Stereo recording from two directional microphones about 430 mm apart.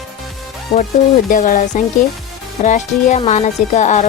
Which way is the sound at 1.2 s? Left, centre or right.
Centre.